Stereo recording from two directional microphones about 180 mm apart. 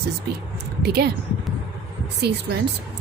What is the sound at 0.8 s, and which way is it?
Speech, 60° right (ahead or behind).